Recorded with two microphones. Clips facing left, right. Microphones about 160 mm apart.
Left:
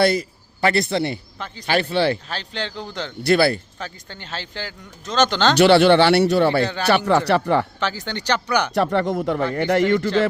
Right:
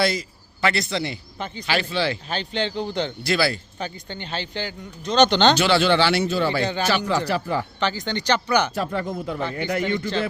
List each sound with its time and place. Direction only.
0.0 s a man's voice: 55° left (ahead or behind)
2.4 s speech: centre (ahead or behind)
3.2 s speech: 55° left (ahead or behind)
4.2 s speech: centre (ahead or behind)
5.5 s speech: 65° left (ahead or behind)
7.8 s speech: 10° left (ahead or behind)
8.3 s speech: 10° right (ahead or behind)
8.7 s a man's voice: 70° left (ahead or behind)